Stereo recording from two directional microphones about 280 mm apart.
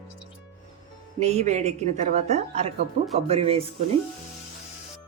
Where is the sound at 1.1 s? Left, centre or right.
Right.